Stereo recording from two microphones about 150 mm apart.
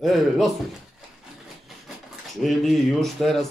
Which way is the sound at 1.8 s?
Centre (ahead or behind).